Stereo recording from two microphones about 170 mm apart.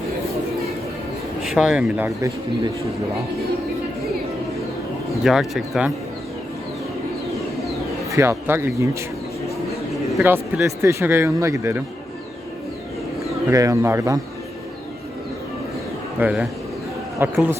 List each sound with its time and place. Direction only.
1.4 s speech: centre (ahead or behind)
5.2 s speech: centre (ahead or behind)
8.1 s speech: 15° right (ahead or behind)
10.2 s speech: 10° right (ahead or behind)
13.5 s speech: 20° right (ahead or behind)
16.1 s speech: 10° right (ahead or behind)